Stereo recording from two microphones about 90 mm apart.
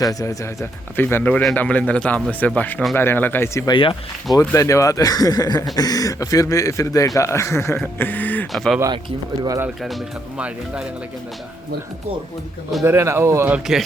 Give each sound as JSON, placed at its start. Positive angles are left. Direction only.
{"t": 0.0, "sound": "speech", "side_deg": 40}
{"t": 0.6, "sound": "speech", "side_deg": 25}
{"t": 3.7, "sound": "speech", "side_deg": 70}
{"t": 4.4, "sound": "speech", "side_deg": 35}
{"t": 8.5, "sound": "speech", "side_deg": 5}
{"t": 10.3, "sound": "speech", "side_deg": -10}
{"t": 12.8, "sound": "speech", "side_deg": -30}
{"t": 13.7, "sound": "speech", "side_deg": -5}